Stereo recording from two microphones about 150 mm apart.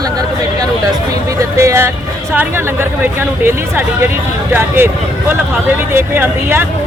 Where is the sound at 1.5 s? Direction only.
20° right (ahead or behind).